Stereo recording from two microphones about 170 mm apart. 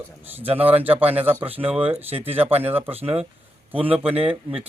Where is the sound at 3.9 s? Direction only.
35° right (ahead or behind).